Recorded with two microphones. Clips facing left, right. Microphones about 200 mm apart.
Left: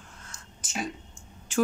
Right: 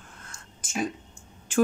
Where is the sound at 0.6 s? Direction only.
50° right (ahead or behind).